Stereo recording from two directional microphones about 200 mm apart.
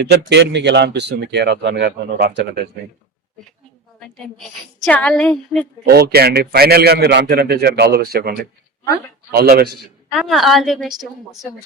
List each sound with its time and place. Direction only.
0.0 s speech: 55° right (ahead or behind)
4.9 s a woman's voice: 5° left (ahead or behind)
5.8 s a man's voice: 55° right (ahead or behind)
9.7 s a woman's voice: centre (ahead or behind)